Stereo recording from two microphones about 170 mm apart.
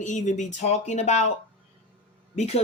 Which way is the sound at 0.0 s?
45° left (ahead or behind).